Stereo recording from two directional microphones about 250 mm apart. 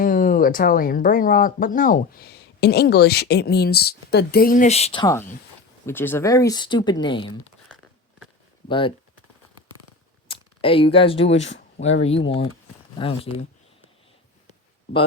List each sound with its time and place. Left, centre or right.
0.0 s speech: left
10.2 s speech: left
11.3 s speech: left
11.8 s speech: left